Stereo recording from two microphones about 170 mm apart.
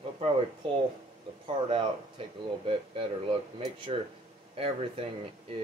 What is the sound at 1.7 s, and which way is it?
Speech, 30° right (ahead or behind).